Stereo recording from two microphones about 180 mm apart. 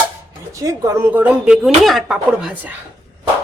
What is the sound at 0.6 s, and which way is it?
Speech, 15° right (ahead or behind).